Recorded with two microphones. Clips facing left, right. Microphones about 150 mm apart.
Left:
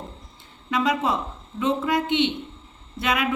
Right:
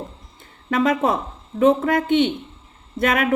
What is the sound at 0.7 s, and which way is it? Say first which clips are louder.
A woman's voice: right 4 dB; 50° right (ahead or behind).